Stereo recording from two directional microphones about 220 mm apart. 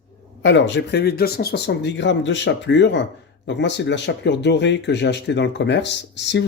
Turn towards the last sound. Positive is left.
turn(degrees=55)  # may be behind; listen again after turning